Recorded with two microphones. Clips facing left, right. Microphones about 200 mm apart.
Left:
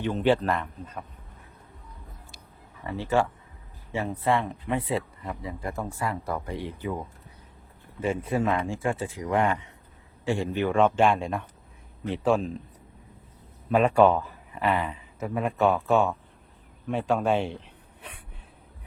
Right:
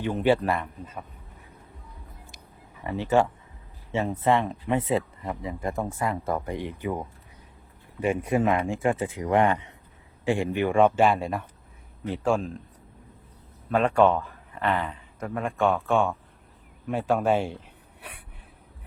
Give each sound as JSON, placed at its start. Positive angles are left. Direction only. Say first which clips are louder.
{"t": 0.0, "sound": "a man's voice", "louder": "right 1 dB", "side_deg": -10}
{"t": 2.8, "sound": "a man's voice", "louder": "right 3 dB", "side_deg": -15}
{"t": 13.7, "sound": "a man's voice", "louder": "left 1 dB", "side_deg": 10}
{"t": 16.8, "sound": "a man's voice", "louder": "right 1 dB", "side_deg": -5}